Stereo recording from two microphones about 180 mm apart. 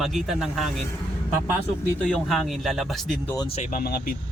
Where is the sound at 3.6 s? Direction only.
50° left (ahead or behind).